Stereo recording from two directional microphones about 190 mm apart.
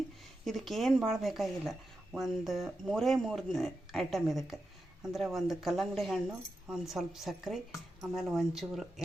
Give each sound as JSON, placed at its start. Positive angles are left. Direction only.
{"t": 0.4, "sound": "speech", "side_deg": 0}